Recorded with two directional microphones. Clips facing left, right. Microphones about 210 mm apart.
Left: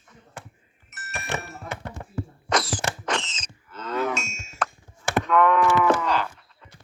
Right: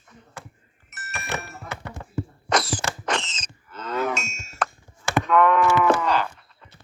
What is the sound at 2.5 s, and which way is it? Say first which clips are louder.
Mechanisms: right 1 dB; 70° right (ahead or behind).